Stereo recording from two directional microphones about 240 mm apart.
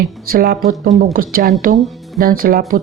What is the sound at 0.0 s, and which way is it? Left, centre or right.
Speech, right.